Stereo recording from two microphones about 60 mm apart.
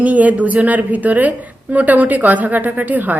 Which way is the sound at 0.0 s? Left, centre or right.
Right.